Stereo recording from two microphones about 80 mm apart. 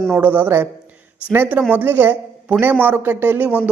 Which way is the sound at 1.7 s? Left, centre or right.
Right.